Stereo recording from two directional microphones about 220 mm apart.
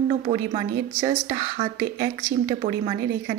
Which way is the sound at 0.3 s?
20° right (ahead or behind).